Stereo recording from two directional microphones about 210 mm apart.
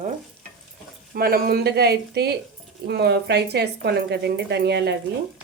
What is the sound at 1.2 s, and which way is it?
A woman's voice, 45° right (ahead or behind).